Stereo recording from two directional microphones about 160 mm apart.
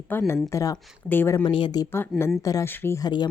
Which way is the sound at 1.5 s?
30° left (ahead or behind).